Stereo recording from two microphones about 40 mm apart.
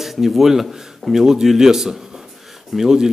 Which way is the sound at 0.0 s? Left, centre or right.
Centre.